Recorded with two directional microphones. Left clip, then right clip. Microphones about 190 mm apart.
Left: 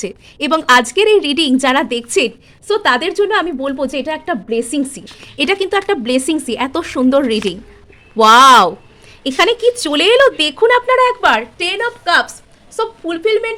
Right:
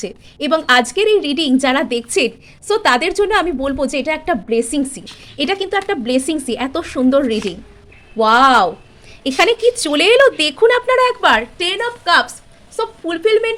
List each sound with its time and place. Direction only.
0.0 s a woman's voice: 15° left (ahead or behind)
8.1 s speech: 30° left (ahead or behind)
9.2 s speech: 10° left (ahead or behind)
13.1 s speech: 5° right (ahead or behind)